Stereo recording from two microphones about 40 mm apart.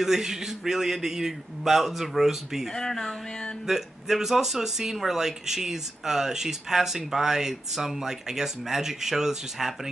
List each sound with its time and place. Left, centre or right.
0.0 s speech: centre
2.7 s a sound: centre
3.6 s speech: centre